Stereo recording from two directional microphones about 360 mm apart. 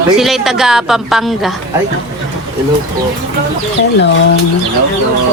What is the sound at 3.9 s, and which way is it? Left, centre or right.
Speech, left.